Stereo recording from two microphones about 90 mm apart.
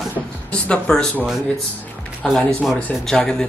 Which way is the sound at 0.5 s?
10° left (ahead or behind).